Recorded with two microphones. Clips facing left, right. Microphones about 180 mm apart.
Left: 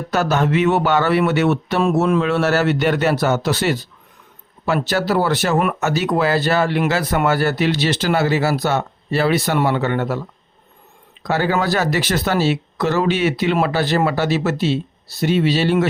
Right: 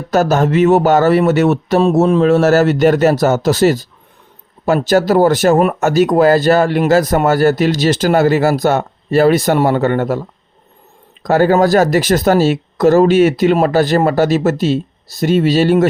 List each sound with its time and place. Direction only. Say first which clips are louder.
0.1 s speech: right 5 dB; 45° right (ahead or behind)
11.2 s speech: right 8 dB; 45° right (ahead or behind)